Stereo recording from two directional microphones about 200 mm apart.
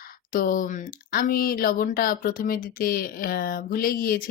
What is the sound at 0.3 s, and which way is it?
Speech, 45° left (ahead or behind).